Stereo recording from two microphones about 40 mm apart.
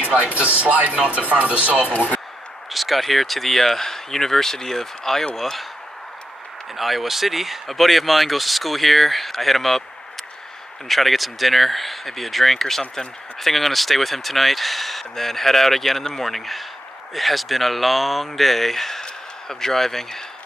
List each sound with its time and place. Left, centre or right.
0.7 s speech: right
1.9 s speech: left
2.7 s speech: centre
6.8 s speech: centre
10.9 s speech: centre